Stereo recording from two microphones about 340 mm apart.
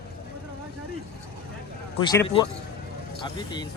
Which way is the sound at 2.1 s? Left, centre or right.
Centre.